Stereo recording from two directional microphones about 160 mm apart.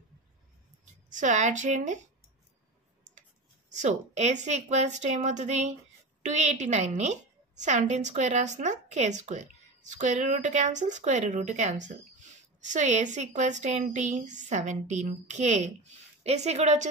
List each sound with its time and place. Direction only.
1.1 s a woman's voice: 50° right (ahead or behind)
3.8 s a woman's voice: 45° right (ahead or behind)